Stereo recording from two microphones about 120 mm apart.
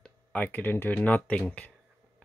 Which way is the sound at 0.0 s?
10° left (ahead or behind).